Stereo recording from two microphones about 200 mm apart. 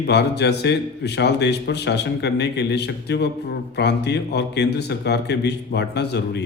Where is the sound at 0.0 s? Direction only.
55° left (ahead or behind).